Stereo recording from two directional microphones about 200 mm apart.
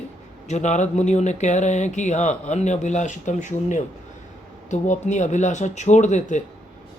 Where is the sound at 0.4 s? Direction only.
35° left (ahead or behind).